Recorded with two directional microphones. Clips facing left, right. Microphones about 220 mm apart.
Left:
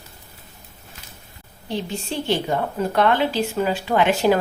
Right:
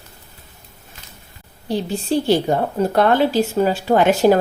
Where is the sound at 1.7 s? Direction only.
40° right (ahead or behind).